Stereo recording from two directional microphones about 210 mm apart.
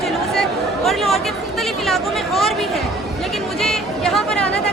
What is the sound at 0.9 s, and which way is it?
Chatter, centre (ahead or behind).